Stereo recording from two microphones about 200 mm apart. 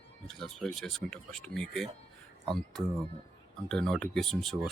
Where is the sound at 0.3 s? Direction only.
Centre (ahead or behind).